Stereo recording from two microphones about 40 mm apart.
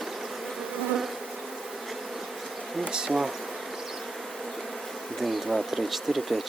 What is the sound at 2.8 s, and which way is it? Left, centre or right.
Speech, centre.